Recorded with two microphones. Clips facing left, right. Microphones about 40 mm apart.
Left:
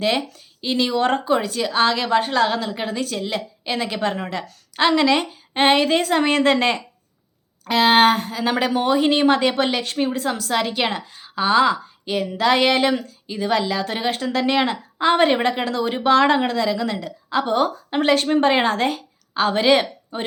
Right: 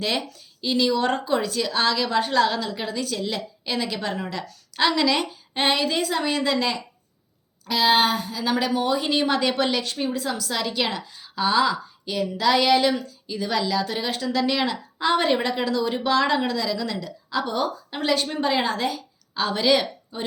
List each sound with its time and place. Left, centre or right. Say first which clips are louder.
0.0 s a woman's voice: left 5 dB; left
5.6 s a woman's voice: left 6 dB; left
10.5 s speech: left 5 dB; left
19.3 s a woman's voice: left 4 dB; left